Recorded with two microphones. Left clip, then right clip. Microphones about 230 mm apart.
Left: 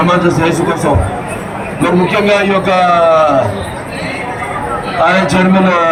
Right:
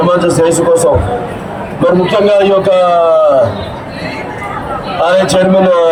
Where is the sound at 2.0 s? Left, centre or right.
Right.